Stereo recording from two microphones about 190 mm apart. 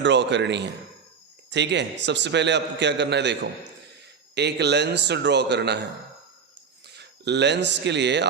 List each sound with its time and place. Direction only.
0.0 s a man's voice: 70° right (ahead or behind)
6.8 s speech: 60° right (ahead or behind)